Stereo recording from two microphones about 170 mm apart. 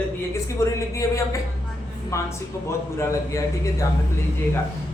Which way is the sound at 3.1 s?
20° left (ahead or behind).